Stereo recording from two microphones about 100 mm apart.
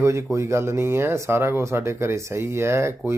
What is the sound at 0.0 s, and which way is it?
Speech, 30° right (ahead or behind).